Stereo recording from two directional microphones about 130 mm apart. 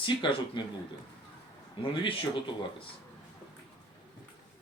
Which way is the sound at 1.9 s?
40° left (ahead or behind).